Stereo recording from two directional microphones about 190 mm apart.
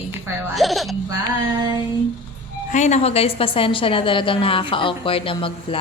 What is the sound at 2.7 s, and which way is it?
A woman's voice, 40° left (ahead or behind).